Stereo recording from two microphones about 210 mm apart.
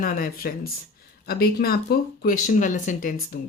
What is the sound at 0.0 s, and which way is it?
Speech, 45° left (ahead or behind).